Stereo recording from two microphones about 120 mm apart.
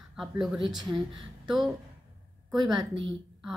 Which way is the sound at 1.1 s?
Centre (ahead or behind).